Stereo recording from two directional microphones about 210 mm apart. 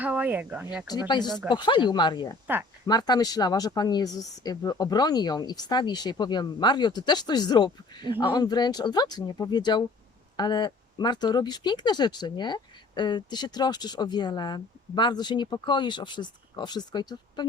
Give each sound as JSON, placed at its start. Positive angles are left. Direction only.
{"t": 0.0, "sound": "speech", "side_deg": -5}
{"t": 0.9, "sound": "speech", "side_deg": 20}